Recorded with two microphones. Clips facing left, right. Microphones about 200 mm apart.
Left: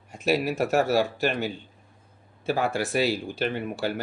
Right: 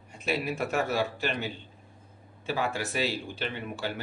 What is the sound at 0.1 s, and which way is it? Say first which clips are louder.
Speech: left 6 dB; 40° left (ahead or behind).